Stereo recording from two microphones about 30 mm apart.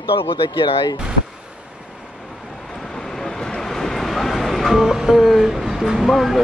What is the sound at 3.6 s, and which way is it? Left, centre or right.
Vehicle, centre.